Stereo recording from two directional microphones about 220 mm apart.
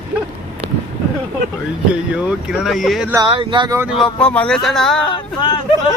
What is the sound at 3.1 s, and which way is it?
Speech, 20° right (ahead or behind).